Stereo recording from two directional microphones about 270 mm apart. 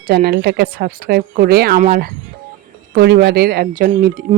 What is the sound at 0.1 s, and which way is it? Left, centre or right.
Speech, right.